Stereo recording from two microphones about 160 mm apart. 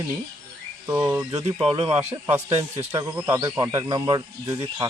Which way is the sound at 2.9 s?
20° right (ahead or behind).